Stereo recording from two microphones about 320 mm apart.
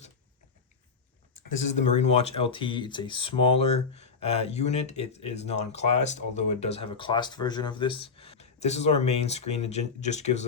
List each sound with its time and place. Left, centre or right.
1.8 s speech: left